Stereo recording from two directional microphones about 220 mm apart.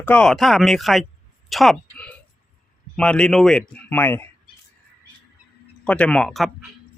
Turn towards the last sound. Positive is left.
turn(degrees=0)  # may be behind; listen again after turning